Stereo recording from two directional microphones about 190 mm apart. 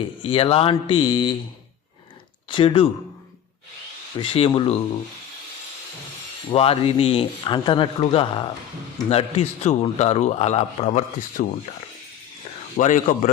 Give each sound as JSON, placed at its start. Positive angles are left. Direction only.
{"t": 0.0, "sound": "speech", "side_deg": 30}
{"t": 2.5, "sound": "speech", "side_deg": 25}
{"t": 4.2, "sound": "speech", "side_deg": 25}
{"t": 6.5, "sound": "a man's voice", "side_deg": 30}
{"t": 12.7, "sound": "a man's voice", "side_deg": 45}